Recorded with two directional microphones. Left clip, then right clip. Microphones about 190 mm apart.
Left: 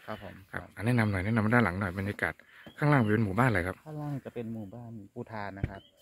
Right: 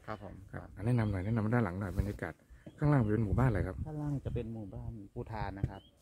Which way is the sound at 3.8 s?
30° right (ahead or behind).